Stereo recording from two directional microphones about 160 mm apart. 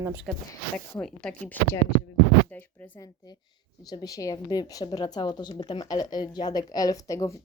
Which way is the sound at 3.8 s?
25° left (ahead or behind).